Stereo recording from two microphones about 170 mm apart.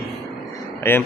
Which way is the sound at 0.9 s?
15° left (ahead or behind).